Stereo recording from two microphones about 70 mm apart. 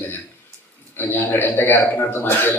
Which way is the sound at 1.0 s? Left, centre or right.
Left.